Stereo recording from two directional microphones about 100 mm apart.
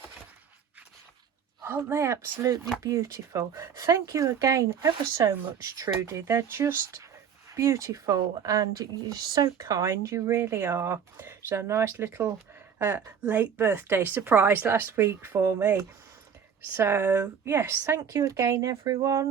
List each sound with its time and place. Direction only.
1.6 s speech: 25° right (ahead or behind)
16.7 s speech: 25° right (ahead or behind)